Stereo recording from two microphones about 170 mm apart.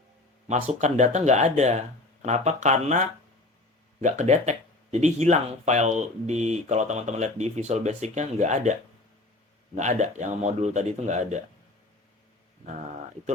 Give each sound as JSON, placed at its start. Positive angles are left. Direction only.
{"t": 0.4, "sound": "speech", "side_deg": -40}
{"t": 4.0, "sound": "speech", "side_deg": -45}
{"t": 9.7, "sound": "speech", "side_deg": -45}
{"t": 12.6, "sound": "speech", "side_deg": -40}